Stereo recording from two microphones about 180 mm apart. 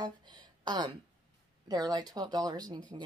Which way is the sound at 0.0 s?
25° right (ahead or behind).